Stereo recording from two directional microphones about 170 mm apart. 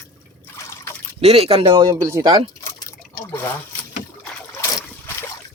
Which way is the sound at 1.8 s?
20° right (ahead or behind).